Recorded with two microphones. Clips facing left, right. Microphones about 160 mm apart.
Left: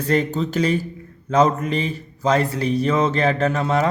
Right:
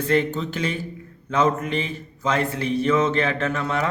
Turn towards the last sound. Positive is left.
turn(degrees=35)  # may be behind; listen again after turning